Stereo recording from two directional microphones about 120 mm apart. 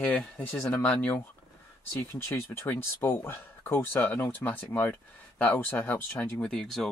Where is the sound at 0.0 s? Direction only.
10° left (ahead or behind).